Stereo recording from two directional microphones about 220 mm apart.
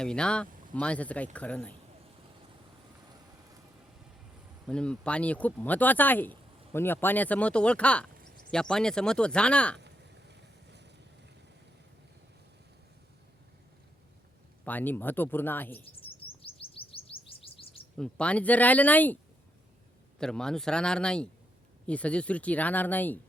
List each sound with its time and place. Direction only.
0.0 s speech: 5° left (ahead or behind)
4.6 s speech: 5° left (ahead or behind)
9.8 s vehicle: 50° right (ahead or behind)
14.6 s speech: 10° left (ahead or behind)
16.0 s chirp: 25° left (ahead or behind)
17.9 s speech: 5° left (ahead or behind)